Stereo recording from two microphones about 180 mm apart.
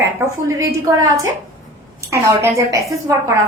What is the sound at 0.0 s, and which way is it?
A woman's voice, 20° right (ahead or behind).